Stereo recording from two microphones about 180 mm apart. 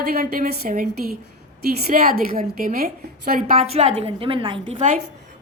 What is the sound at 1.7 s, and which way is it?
A woman's voice, 55° right (ahead or behind).